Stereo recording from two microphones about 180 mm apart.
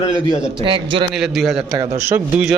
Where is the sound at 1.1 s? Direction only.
Centre (ahead or behind).